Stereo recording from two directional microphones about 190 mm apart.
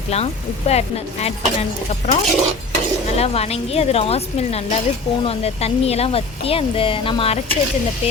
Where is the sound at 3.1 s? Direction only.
35° left (ahead or behind).